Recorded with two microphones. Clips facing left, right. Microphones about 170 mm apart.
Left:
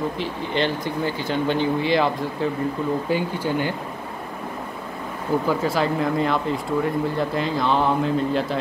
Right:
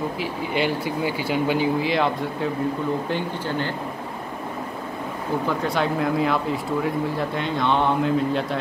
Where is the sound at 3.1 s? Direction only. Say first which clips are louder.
Left 3 dB; 10° left (ahead or behind).